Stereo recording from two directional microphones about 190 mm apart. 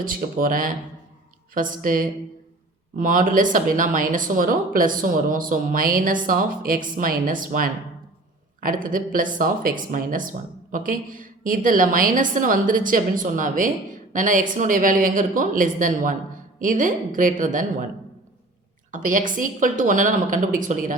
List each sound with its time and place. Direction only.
0.0 s speech: 45° right (ahead or behind)
18.9 s speech: 45° right (ahead or behind)